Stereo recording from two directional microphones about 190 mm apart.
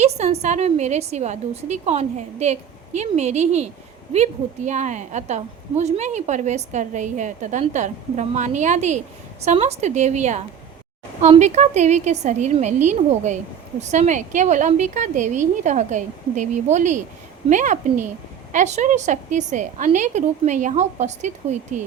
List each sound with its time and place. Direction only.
0.0 s a woman's voice: 35° right (ahead or behind)